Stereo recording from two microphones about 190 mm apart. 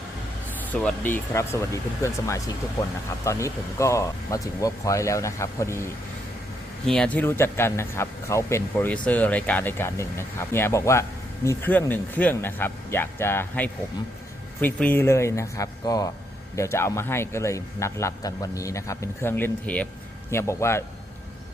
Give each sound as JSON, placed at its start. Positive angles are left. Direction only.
{"t": 0.6, "sound": "speech", "side_deg": 5}
{"t": 6.8, "sound": "speech", "side_deg": 5}